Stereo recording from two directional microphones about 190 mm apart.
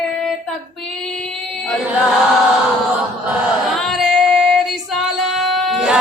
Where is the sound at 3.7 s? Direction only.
Centre (ahead or behind).